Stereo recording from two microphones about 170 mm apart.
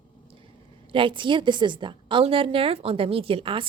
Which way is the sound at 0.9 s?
30° right (ahead or behind).